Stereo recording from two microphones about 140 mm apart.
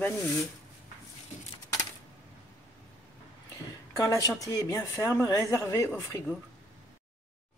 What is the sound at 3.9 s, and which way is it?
Speech, 25° left (ahead or behind).